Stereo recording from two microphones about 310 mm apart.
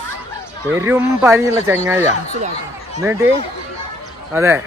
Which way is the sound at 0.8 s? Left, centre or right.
Centre.